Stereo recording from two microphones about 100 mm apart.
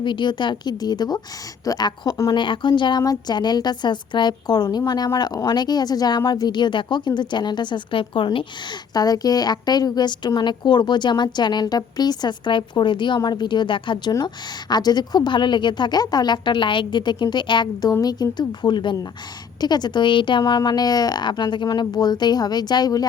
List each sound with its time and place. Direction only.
0.0 s a woman's voice: 50° left (ahead or behind); by 2.3 s 35° left (ahead or behind)
2.3 s a woman's voice: 55° left (ahead or behind)
8.9 s a woman's voice: 40° left (ahead or behind)